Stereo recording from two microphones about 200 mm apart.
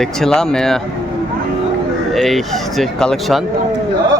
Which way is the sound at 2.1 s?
Centre (ahead or behind).